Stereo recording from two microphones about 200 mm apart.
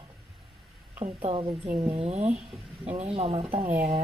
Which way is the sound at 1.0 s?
30° right (ahead or behind).